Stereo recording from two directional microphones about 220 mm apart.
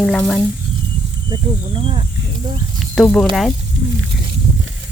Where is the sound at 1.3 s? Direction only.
25° right (ahead or behind).